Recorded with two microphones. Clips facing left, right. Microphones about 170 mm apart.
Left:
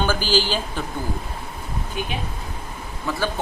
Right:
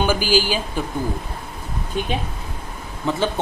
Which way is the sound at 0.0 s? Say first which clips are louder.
Right 3 dB; 10° right (ahead or behind).